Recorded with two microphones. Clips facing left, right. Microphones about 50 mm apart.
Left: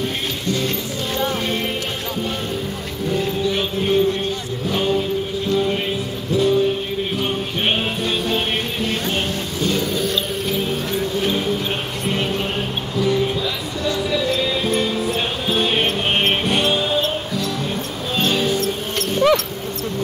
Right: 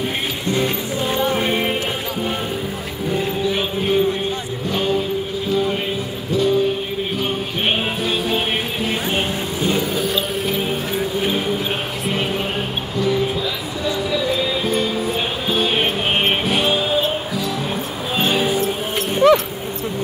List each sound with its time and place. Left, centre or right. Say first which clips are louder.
1.1 s music: right 2 dB; centre
3.1 s music: even; centre
8.0 s music: right 1 dB; centre
8.8 s music: right 2 dB; centre